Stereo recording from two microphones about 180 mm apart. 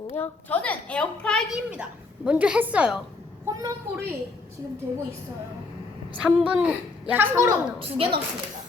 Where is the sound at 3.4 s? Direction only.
20° right (ahead or behind).